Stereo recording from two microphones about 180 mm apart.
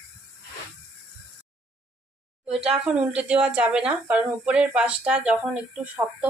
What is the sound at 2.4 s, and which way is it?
Speech, 5° right (ahead or behind).